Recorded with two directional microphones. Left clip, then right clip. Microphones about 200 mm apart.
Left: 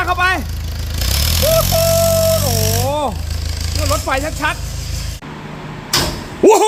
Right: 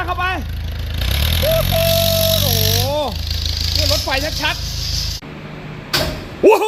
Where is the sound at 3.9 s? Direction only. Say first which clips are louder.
Left 1 dB; centre (ahead or behind).